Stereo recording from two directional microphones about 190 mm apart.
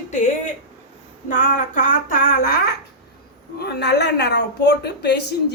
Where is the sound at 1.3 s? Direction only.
45° left (ahead or behind).